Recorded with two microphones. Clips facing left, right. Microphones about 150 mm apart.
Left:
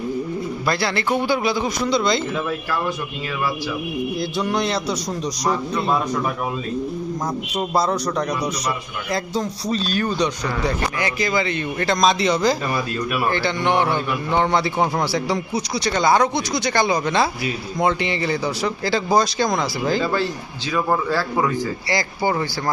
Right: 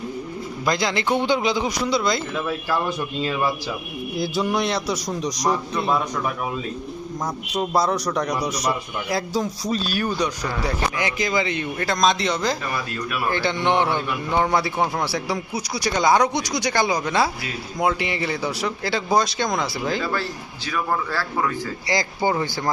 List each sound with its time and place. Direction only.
0.6 s a man's voice: 15° right (ahead or behind)
2.0 s a man's voice: centre (ahead or behind)
4.2 s a man's voice: 5° right (ahead or behind)
7.5 s a man's voice: centre (ahead or behind)
11.9 s a man's voice: centre (ahead or behind)
13.3 s a man's voice: 15° right (ahead or behind)
14.3 s a man's voice: 10° right (ahead or behind)
20.7 s speech: 15° left (ahead or behind)
21.8 s a man's voice: 20° right (ahead or behind)